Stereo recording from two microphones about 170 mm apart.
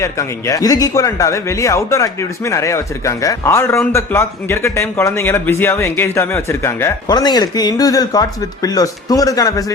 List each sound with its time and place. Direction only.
0.0 s speech: 15° left (ahead or behind)
7.2 s speech: 25° left (ahead or behind)